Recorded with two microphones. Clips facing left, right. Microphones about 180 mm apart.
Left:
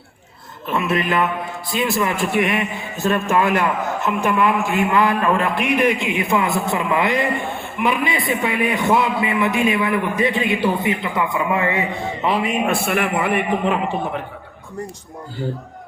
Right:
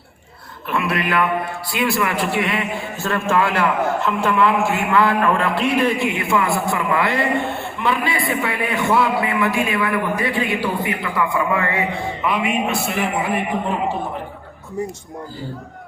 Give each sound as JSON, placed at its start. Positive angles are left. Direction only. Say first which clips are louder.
{"t": 0.7, "sound": "a man's voice", "louder": "left 1 dB", "side_deg": 20}
{"t": 2.4, "sound": "a man's voice", "louder": "left 2 dB", "side_deg": 20}
{"t": 12.2, "sound": "a man's voice", "louder": "left 1 dB", "side_deg": 35}
{"t": 12.6, "sound": "a man's voice", "louder": "left 2 dB", "side_deg": 55}